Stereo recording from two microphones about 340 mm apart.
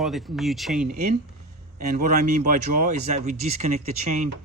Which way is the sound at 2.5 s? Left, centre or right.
Right.